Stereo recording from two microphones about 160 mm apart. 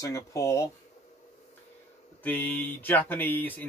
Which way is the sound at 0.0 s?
20° left (ahead or behind).